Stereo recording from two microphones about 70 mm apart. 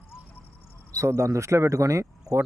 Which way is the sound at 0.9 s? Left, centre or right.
Right.